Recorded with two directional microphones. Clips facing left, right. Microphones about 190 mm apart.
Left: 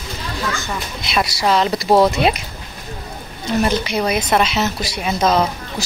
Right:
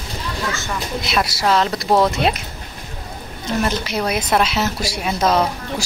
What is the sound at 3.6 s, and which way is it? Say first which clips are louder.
Speech: left 3 dB; centre (ahead or behind).